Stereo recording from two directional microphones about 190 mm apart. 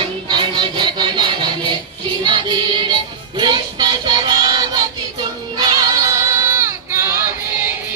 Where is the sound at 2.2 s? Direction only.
25° right (ahead or behind).